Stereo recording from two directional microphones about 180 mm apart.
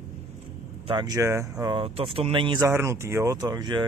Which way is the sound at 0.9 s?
20° right (ahead or behind).